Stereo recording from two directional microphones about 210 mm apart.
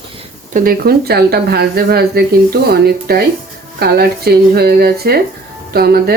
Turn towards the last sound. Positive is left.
turn(degrees=-50)  # may be behind; listen again after turning